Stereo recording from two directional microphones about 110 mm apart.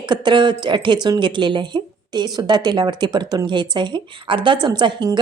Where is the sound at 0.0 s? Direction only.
45° right (ahead or behind).